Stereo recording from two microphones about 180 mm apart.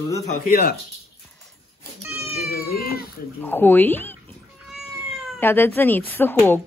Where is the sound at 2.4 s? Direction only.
60° left (ahead or behind).